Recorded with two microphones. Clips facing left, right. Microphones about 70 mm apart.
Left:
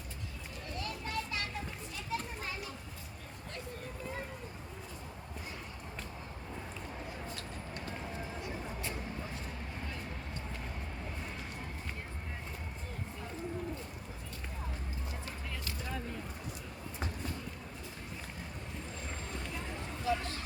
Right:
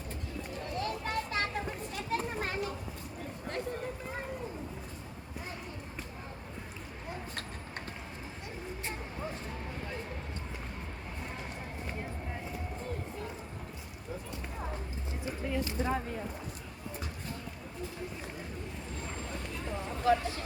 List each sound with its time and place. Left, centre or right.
0.8 s children playing: right
15.2 s a sound: right
20.1 s vehicle: right